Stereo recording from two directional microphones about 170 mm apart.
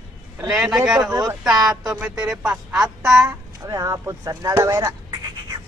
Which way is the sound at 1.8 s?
5° right (ahead or behind).